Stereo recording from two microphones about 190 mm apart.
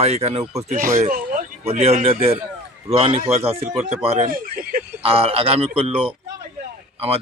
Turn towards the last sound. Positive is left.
turn(degrees=-30)  # may be behind; listen again after turning